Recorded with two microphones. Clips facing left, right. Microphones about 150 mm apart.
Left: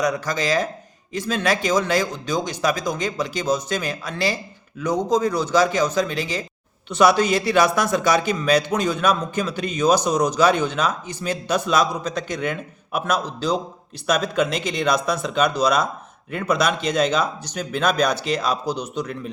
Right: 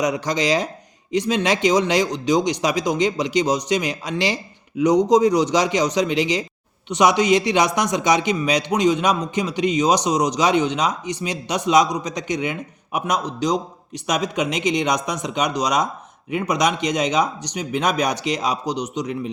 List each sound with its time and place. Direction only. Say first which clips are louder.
0.0 s a man's voice: right 2 dB; 20° right (ahead or behind)